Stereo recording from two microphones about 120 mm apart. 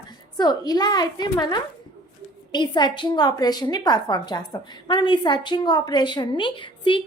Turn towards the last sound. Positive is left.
turn(degrees=45)  # may be behind; listen again after turning